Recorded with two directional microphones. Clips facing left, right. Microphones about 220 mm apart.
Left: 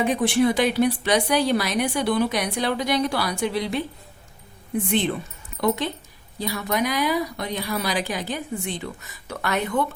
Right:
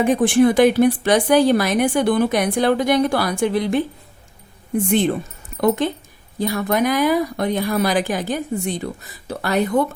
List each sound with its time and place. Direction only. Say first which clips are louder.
0.0 s a woman's voice: right 5 dB; 50° right (ahead or behind)
4.9 s a woman's voice: right 6 dB; 45° right (ahead or behind)